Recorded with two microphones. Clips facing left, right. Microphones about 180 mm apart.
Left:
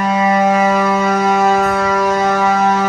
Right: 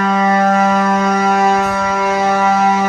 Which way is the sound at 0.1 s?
10° left (ahead or behind).